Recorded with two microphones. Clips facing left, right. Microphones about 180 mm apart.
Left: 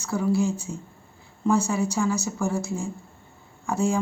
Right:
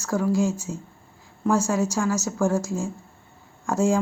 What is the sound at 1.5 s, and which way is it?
Speech, 90° right.